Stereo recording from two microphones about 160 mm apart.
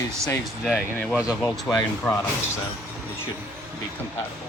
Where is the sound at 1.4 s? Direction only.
10° left (ahead or behind).